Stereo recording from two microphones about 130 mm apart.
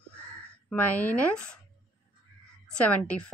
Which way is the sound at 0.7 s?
10° left (ahead or behind).